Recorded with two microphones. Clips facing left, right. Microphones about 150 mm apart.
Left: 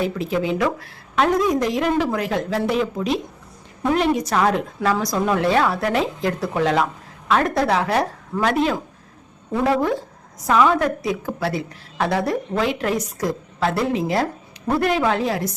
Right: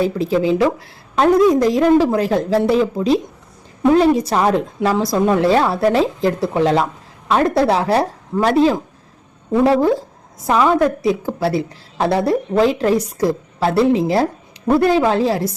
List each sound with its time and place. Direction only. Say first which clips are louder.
0.0 s a woman's voice: right 5 dB; 35° right (ahead or behind)
10.7 s a woman's voice: right 5 dB; 30° right (ahead or behind)